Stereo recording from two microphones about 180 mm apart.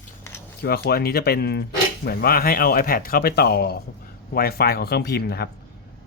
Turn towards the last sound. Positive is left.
turn(degrees=65)  # may be behind; listen again after turning